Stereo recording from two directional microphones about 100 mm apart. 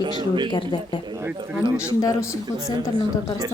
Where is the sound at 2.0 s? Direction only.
35° left (ahead or behind).